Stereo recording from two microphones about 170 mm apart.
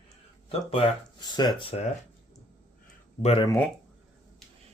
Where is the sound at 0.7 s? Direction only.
30° left (ahead or behind).